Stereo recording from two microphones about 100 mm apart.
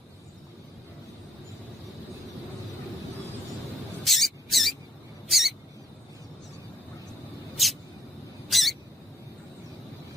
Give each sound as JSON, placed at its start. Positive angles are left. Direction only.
{"t": 4.0, "sound": "mouse", "side_deg": 0}
{"t": 5.3, "sound": "rodents", "side_deg": 0}
{"t": 8.4, "sound": "a sound", "side_deg": 0}